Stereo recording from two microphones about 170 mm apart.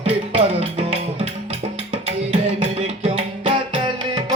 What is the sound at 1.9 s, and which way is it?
Music, 35° right (ahead or behind).